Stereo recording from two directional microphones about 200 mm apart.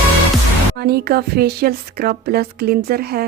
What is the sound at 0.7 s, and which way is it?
Speech, 50° right (ahead or behind).